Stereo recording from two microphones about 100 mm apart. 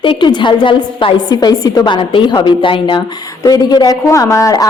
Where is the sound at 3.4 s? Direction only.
40° left (ahead or behind).